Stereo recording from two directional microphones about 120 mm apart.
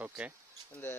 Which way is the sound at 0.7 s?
20° left (ahead or behind).